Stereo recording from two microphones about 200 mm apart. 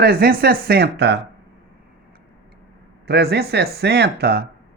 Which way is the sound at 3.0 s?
55° right (ahead or behind).